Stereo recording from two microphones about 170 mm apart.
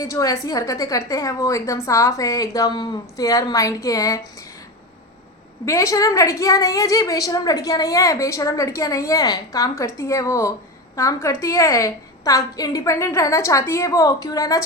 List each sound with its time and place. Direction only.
0.0 s a woman's voice: 20° left (ahead or behind)
5.6 s a woman's voice: 20° left (ahead or behind)